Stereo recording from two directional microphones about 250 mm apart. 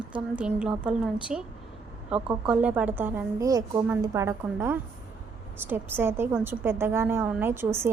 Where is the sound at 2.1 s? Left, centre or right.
Centre.